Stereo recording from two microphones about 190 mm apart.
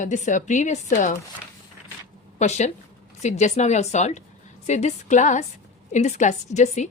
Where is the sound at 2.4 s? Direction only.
35° left (ahead or behind).